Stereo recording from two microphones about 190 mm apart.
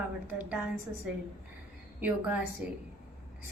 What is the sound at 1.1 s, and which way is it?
A woman's voice, 5° right (ahead or behind).